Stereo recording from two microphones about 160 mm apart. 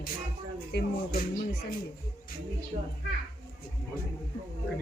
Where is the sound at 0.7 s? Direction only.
90° left.